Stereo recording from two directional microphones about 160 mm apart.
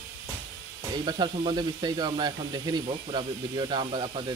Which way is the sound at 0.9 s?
25° right (ahead or behind).